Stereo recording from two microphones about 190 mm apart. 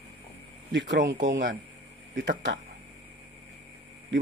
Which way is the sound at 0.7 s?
60° right (ahead or behind).